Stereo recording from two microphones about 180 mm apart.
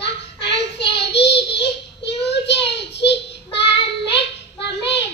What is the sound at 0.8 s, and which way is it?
Child singing, 70° left (ahead or behind).